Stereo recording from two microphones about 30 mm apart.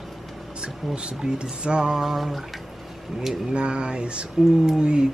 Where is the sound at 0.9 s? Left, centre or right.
Right.